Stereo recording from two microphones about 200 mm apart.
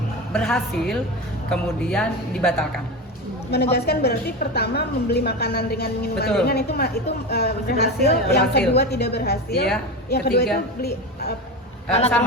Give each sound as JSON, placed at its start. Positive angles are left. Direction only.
{"t": 0.3, "sound": "speech", "side_deg": 0}
{"t": 3.5, "sound": "a woman's voice", "side_deg": 55}
{"t": 11.9, "sound": "a man's voice", "side_deg": 30}